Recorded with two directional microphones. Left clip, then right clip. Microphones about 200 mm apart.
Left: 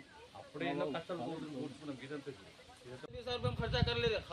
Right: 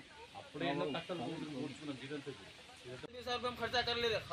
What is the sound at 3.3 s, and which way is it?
Speech, 30° left (ahead or behind).